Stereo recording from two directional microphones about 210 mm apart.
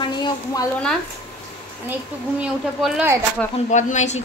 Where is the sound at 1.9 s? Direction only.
5° right (ahead or behind).